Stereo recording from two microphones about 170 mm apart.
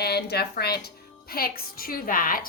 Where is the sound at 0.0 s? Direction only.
70° left (ahead or behind).